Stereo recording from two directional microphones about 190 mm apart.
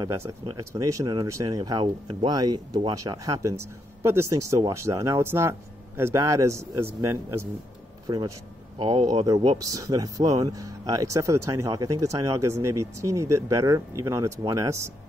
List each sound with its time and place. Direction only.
0.0 s speech: 15° right (ahead or behind)